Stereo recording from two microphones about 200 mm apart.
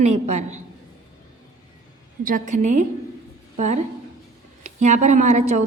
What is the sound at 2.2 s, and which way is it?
A woman's voice, 40° right (ahead or behind).